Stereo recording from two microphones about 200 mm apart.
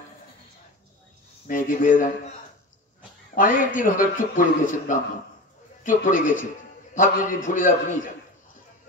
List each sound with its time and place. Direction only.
1.5 s a man's voice: 40° left (ahead or behind)
3.3 s a man's voice: 40° left (ahead or behind)